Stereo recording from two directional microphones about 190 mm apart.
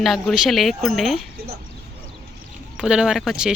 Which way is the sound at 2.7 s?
5° right (ahead or behind).